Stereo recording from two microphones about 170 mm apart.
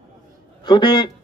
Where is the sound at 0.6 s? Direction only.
30° left (ahead or behind).